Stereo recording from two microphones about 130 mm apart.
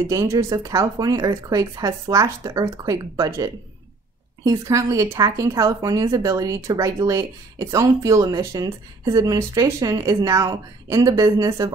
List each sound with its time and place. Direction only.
0.1 s speech: 25° right (ahead or behind)